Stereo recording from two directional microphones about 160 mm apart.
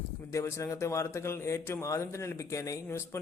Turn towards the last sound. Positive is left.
turn(degrees=20)  # may be behind; listen again after turning